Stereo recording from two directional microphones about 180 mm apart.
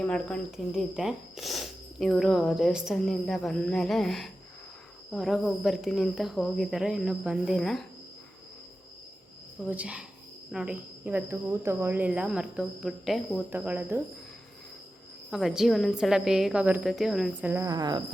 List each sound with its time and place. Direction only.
0.0 s speech: 5° left (ahead or behind)
9.6 s speech: 5° right (ahead or behind)
15.3 s speech: centre (ahead or behind)
17.5 s speech: 15° right (ahead or behind)